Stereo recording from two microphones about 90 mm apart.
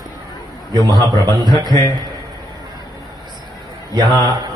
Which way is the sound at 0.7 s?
50° right (ahead or behind).